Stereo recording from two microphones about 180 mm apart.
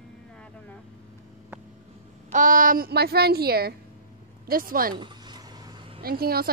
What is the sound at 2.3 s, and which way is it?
A woman's voice, 50° right (ahead or behind).